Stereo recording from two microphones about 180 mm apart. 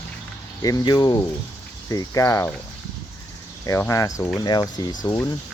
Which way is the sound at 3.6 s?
15° left (ahead or behind).